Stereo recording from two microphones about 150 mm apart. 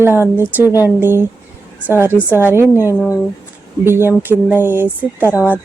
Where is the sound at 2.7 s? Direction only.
20° left (ahead or behind).